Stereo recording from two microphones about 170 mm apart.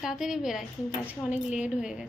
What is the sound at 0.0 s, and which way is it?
A woman's voice, 5° right (ahead or behind).